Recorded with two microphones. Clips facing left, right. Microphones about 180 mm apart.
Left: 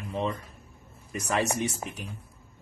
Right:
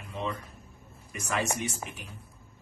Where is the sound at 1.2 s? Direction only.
35° left (ahead or behind).